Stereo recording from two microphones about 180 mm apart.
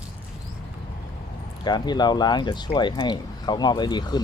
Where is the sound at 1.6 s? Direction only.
25° left (ahead or behind).